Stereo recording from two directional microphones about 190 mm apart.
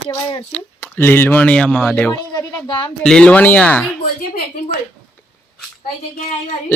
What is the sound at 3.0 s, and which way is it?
Speech, 5° left (ahead or behind).